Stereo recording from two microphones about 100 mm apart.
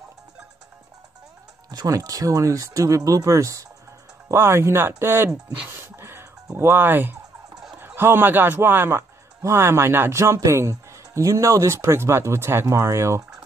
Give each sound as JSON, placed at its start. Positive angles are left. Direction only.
{"t": 1.7, "sound": "speech", "side_deg": -35}
{"t": 5.9, "sound": "a sound", "side_deg": -25}
{"t": 7.8, "sound": "speech", "side_deg": -20}